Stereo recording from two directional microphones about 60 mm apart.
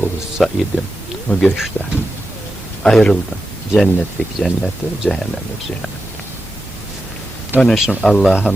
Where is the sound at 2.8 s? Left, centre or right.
Centre.